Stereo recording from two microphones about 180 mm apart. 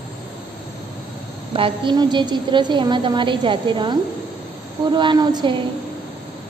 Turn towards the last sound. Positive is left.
turn(degrees=-25)  # may be behind; listen again after turning